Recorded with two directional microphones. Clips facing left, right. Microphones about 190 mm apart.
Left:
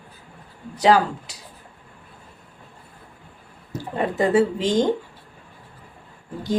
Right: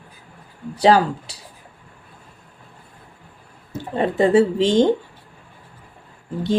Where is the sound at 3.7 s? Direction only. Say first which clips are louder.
Right 3 dB; 25° right (ahead or behind).